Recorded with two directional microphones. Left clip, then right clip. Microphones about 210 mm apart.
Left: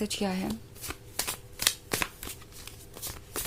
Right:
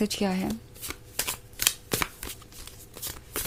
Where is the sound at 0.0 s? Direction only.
15° right (ahead or behind).